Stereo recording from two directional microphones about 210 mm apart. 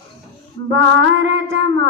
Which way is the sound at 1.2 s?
60° right (ahead or behind).